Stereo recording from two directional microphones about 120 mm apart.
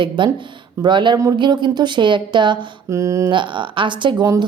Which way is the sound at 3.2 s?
40° right (ahead or behind).